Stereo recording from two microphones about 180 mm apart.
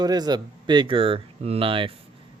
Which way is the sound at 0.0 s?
20° right (ahead or behind).